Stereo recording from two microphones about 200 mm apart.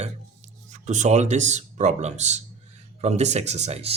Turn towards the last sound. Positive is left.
turn(degrees=-30)  # may be behind; listen again after turning